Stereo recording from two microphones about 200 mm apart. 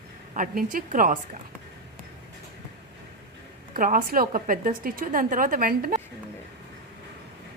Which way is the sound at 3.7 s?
45° right (ahead or behind).